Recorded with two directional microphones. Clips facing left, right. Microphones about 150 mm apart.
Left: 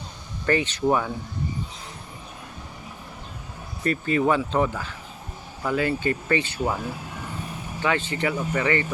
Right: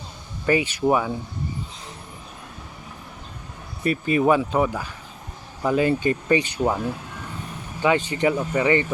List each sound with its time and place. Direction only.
0.4 s speech: 10° right (ahead or behind)
3.8 s speech: 15° right (ahead or behind)
7.8 s speech: 15° right (ahead or behind)